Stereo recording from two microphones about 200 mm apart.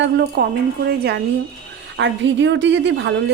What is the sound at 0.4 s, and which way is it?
Speech, 55° right (ahead or behind).